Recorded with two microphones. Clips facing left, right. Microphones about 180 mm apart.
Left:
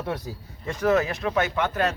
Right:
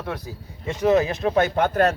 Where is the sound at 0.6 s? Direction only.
25° right (ahead or behind).